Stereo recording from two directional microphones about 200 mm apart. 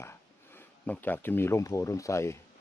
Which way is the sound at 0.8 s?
10° left (ahead or behind).